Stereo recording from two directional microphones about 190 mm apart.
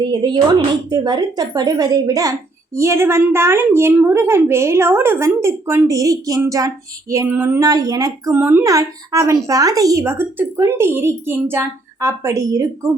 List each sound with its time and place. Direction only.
0.0 s a woman's voice: 25° right (ahead or behind)